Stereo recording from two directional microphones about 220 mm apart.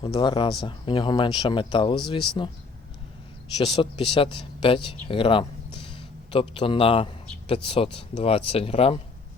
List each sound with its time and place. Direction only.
0.0 s a man's voice: 20° left (ahead or behind)
3.6 s a man's voice: 25° left (ahead or behind)